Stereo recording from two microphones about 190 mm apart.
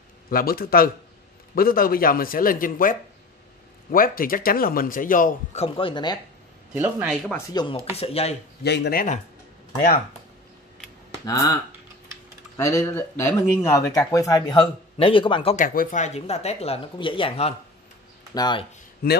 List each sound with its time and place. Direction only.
0.3 s a man's voice: 50° left (ahead or behind); by 6.1 s 25° left (ahead or behind)
6.7 s speech: 10° right (ahead or behind)
7.5 s a man's voice: 25° left (ahead or behind)
8.6 s speech: 65° left (ahead or behind)
11.2 s speech: 20° left (ahead or behind)
12.5 s a man's voice: 15° left (ahead or behind)
15.5 s a man's voice: 45° left (ahead or behind); by 18.7 s 20° left (ahead or behind)